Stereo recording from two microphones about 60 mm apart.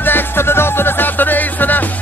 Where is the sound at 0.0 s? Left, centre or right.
Left.